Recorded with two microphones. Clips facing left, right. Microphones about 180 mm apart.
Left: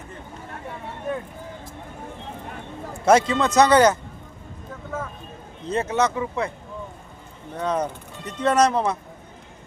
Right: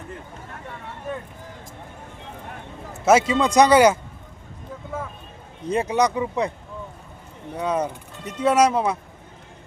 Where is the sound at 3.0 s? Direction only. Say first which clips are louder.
Even; 10° right (ahead or behind).